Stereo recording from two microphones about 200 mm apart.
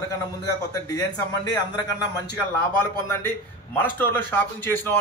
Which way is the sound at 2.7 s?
10° left (ahead or behind).